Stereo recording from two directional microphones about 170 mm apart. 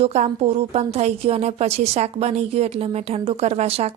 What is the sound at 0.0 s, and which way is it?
A woman's voice, 40° right (ahead or behind).